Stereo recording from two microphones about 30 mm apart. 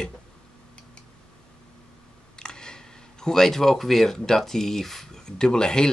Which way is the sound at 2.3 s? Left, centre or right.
Left.